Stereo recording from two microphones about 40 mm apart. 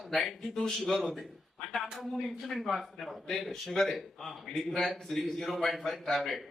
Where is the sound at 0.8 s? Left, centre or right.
Centre.